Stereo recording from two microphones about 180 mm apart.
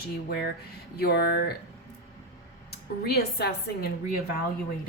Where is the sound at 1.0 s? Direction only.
60° left (ahead or behind).